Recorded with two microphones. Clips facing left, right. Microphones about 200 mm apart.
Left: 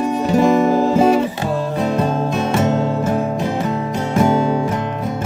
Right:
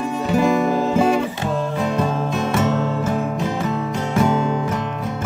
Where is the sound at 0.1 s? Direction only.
35° left (ahead or behind).